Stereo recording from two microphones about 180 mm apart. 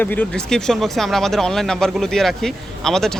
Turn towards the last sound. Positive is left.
turn(degrees=0)  # may be behind; listen again after turning